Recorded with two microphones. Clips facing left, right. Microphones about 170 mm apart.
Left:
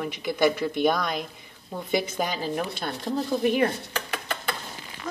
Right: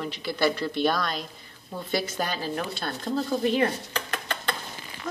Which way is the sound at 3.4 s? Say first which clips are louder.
Left 2 dB; 15° left (ahead or behind).